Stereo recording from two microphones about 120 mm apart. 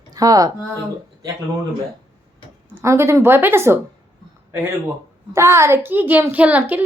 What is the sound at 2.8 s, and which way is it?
Speech, 25° right (ahead or behind).